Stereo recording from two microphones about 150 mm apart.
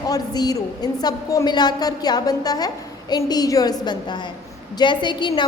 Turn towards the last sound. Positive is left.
turn(degrees=30)  # may be behind; listen again after turning